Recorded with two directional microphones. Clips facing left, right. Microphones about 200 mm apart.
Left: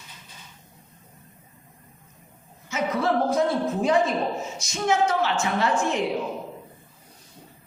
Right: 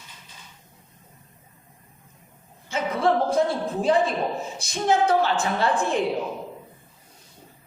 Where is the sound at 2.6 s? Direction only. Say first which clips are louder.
Right 2 dB; 30° right (ahead or behind).